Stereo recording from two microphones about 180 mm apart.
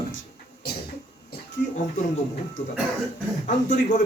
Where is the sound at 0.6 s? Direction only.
60° left (ahead or behind).